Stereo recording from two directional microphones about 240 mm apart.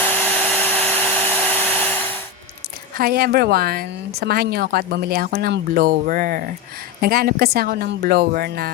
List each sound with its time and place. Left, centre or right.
0.0 s hair dryer: centre
3.0 s a woman's voice: right